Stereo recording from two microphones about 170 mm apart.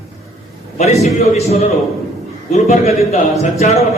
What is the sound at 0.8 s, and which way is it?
A man's voice, 40° left (ahead or behind).